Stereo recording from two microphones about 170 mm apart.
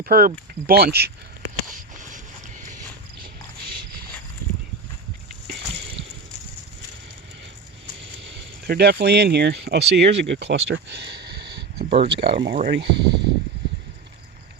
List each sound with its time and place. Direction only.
0.0 s speech: 60° right (ahead or behind)
1.7 s a sound: 50° right (ahead or behind)
7.9 s speech: 90° right
10.7 s a sound: 90° right
11.8 s speech: 35° right (ahead or behind)
12.0 s speech: 90° right